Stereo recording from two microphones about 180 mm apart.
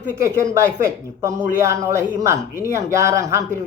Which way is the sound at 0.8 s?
20° right (ahead or behind).